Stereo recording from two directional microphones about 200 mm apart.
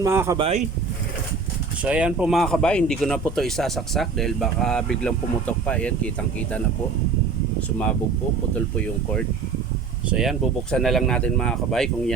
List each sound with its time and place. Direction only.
0.0 s speech: 15° right (ahead or behind)
0.3 s speech: 30° right (ahead or behind)
1.8 s speech: 5° right (ahead or behind)
10.1 s speech: centre (ahead or behind)